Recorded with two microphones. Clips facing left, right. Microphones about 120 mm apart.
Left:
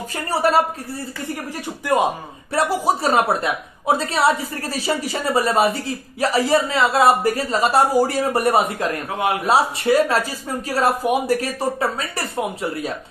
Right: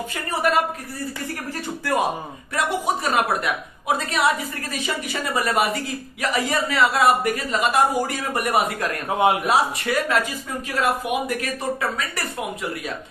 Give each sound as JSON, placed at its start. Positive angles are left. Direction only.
{"t": 0.3, "sound": "a woman's voice", "side_deg": 30}
{"t": 2.5, "sound": "a woman's voice", "side_deg": 35}